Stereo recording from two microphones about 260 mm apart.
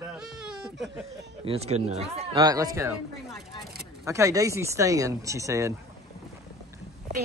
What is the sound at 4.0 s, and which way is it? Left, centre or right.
Speech, centre.